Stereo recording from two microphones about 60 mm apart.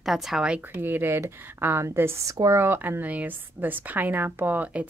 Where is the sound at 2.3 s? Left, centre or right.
Right.